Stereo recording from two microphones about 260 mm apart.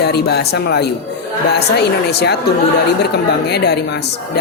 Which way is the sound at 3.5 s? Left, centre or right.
Left.